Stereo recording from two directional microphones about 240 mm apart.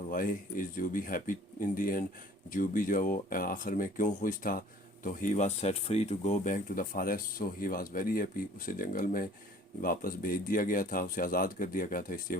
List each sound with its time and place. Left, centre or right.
0.1 s speech: left